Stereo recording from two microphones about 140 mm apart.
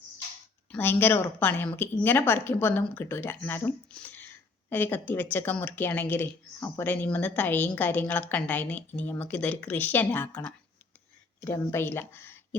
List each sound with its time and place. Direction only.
0.7 s speech: 15° left (ahead or behind)